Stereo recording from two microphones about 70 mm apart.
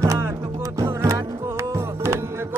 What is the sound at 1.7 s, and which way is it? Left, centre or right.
Music, right.